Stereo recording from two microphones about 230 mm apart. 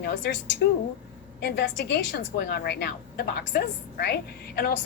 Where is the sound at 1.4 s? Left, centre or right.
Left.